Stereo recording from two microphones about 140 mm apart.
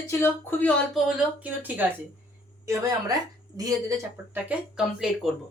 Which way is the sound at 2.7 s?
25° right (ahead or behind).